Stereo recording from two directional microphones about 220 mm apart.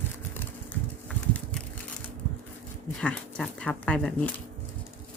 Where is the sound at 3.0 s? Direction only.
5° left (ahead or behind).